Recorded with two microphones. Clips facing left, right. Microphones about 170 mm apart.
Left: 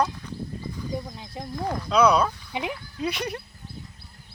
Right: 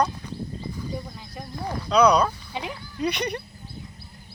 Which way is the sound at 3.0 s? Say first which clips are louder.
Right 3 dB; centre (ahead or behind).